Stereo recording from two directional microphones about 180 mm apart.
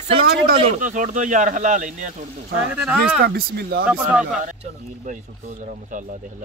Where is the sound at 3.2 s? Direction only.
60° right (ahead or behind).